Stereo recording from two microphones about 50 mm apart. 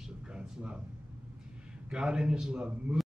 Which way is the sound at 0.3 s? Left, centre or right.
Centre.